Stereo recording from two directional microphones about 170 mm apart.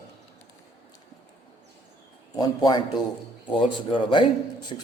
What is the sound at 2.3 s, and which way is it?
A man's voice, 25° left (ahead or behind).